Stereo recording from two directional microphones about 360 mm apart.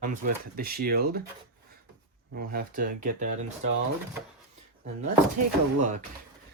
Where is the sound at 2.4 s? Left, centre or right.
Right.